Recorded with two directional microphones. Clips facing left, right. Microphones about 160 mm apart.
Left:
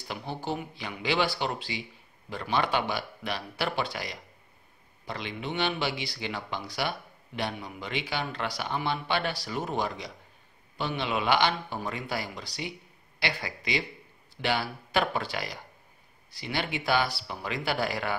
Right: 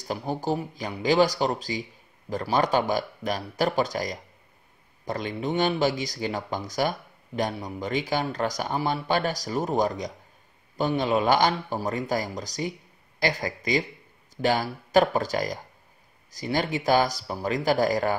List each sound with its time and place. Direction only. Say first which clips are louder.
0.0 s speech: right 6 dB; 40° right (ahead or behind)